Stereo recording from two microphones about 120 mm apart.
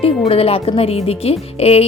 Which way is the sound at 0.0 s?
55° left (ahead or behind).